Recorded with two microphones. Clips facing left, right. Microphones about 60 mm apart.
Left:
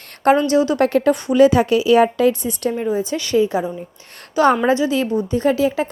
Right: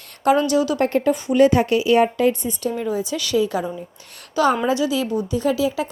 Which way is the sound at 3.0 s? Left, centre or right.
Left.